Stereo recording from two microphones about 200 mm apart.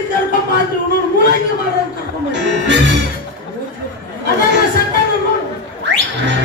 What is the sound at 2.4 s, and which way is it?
Music, 60° right (ahead or behind).